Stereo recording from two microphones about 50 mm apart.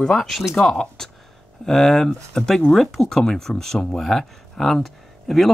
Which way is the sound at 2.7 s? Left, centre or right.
Centre.